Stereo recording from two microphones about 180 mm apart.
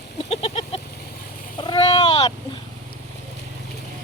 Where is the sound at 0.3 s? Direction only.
30° left (ahead or behind).